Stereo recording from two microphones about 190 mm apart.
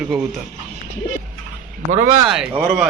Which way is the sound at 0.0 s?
5° right (ahead or behind).